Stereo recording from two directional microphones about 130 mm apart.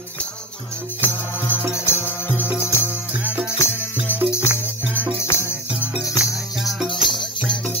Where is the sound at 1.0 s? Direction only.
20° left (ahead or behind).